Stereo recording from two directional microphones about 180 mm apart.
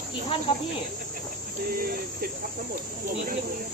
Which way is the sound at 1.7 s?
55° right (ahead or behind).